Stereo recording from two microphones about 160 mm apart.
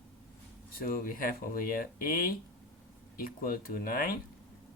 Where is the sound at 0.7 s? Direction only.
65° left (ahead or behind).